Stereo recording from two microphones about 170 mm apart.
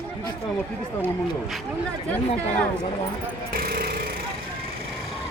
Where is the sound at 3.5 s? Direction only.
60° right (ahead or behind).